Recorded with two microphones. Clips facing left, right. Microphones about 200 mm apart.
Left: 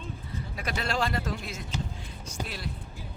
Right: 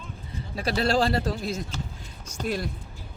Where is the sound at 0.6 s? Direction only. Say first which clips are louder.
Right 7 dB; 35° right (ahead or behind).